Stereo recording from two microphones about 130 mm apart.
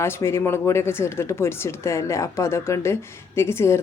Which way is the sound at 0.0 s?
20° left (ahead or behind).